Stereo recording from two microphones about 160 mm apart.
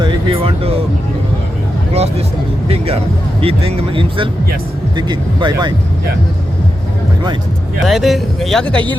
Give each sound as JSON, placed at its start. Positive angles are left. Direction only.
{"t": 0.0, "sound": "speech", "side_deg": -35}
{"t": 1.9, "sound": "speech", "side_deg": -40}
{"t": 7.9, "sound": "speech", "side_deg": 0}